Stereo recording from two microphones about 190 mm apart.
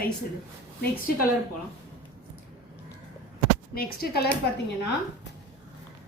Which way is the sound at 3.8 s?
55° left (ahead or behind).